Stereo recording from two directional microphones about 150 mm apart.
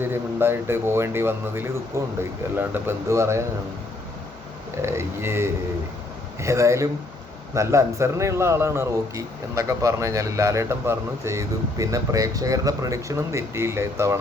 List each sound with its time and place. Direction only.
0.0 s a man's voice: 15° right (ahead or behind)
4.8 s a man's voice: 15° right (ahead or behind)